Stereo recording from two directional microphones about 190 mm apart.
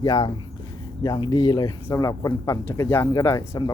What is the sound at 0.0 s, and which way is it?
Speech, 20° left (ahead or behind).